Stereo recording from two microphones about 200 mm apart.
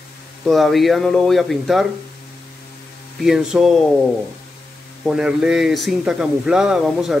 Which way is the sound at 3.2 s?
Centre (ahead or behind).